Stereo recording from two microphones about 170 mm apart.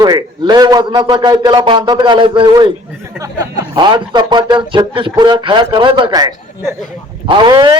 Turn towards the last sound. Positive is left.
turn(degrees=-25)  # may be behind; listen again after turning